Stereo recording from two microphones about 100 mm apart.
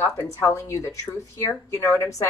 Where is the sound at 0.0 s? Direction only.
25° left (ahead or behind).